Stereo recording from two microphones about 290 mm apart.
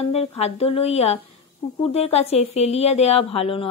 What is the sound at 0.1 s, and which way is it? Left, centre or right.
A woman's voice, left.